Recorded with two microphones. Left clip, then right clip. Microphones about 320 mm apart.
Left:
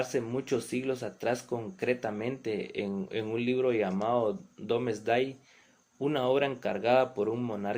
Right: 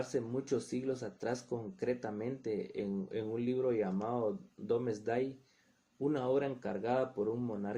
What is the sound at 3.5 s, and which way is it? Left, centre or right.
Speech, right.